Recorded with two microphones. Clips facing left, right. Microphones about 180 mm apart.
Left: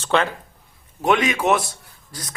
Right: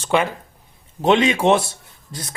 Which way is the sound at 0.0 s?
10° right (ahead or behind).